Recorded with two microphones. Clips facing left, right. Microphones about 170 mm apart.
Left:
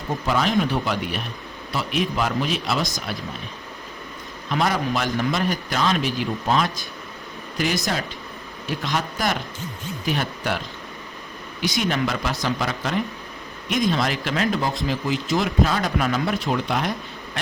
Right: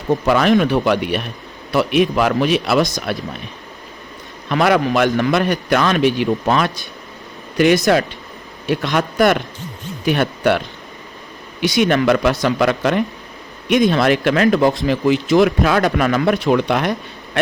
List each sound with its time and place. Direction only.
0.3 s a man's voice: 65° right (ahead or behind)
4.4 s a man's voice: 70° right (ahead or behind)
11.8 s a man's voice: 65° right (ahead or behind)